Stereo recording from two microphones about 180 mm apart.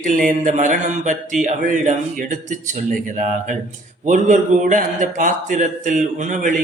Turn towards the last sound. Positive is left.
turn(degrees=-45)  # may be behind; listen again after turning